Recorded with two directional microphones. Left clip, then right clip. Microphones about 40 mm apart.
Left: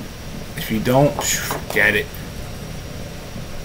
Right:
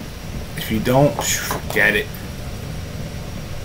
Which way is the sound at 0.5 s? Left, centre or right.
Centre.